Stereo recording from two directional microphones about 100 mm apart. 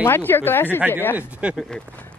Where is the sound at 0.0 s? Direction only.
20° left (ahead or behind).